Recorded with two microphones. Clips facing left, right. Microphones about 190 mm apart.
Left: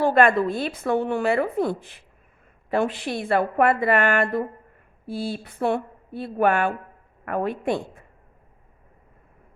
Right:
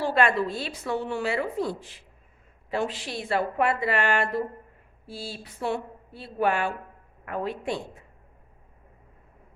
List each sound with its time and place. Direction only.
0.0 s a woman's voice: 50° left (ahead or behind)